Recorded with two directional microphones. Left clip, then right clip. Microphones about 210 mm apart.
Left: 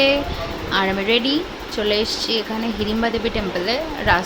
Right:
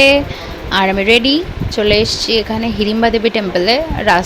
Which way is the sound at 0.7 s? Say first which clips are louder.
Right 7 dB; 30° right (ahead or behind).